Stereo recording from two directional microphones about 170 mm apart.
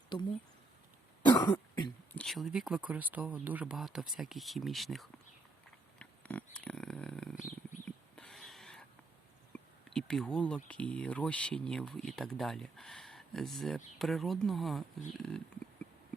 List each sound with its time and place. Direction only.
1.2 s cough: 25° left (ahead or behind)
2.1 s speech: centre (ahead or behind)
6.0 s a sound: 5° left (ahead or behind)
9.5 s speech: 5° left (ahead or behind)